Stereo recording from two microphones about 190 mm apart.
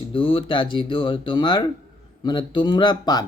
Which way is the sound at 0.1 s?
30° left (ahead or behind).